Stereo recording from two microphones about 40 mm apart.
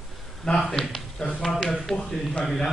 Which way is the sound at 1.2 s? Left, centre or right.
Centre.